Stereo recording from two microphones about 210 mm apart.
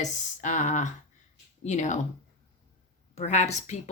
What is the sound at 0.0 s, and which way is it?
Speech, 35° left (ahead or behind).